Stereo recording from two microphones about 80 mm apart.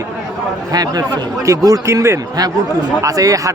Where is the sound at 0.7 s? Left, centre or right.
Right.